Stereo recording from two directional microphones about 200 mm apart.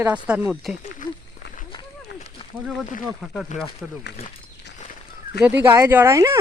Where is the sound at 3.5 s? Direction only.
40° left (ahead or behind).